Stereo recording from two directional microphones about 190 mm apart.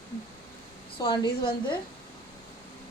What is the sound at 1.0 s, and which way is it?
Speech, 20° left (ahead or behind).